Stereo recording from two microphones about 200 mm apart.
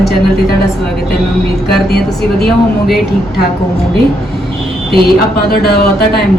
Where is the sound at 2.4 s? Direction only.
Centre (ahead or behind).